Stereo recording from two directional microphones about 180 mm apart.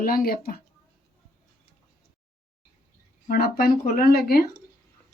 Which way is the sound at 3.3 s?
55° left (ahead or behind).